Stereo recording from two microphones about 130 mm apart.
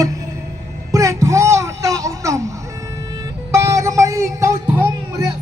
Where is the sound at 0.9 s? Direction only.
25° right (ahead or behind).